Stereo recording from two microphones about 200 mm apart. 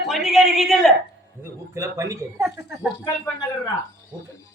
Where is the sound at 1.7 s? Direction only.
15° right (ahead or behind).